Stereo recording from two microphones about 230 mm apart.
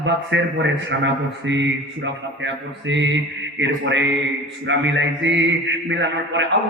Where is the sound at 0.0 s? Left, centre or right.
Right.